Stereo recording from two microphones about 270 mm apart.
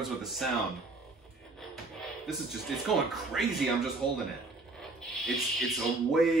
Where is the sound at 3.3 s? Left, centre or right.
Centre.